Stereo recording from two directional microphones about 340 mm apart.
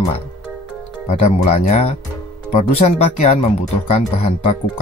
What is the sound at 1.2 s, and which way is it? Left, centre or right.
Speech, centre.